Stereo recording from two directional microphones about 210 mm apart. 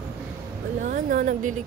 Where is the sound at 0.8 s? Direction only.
40° right (ahead or behind).